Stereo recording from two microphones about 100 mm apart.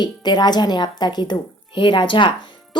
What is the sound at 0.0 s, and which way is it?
A woman's voice, 45° left (ahead or behind).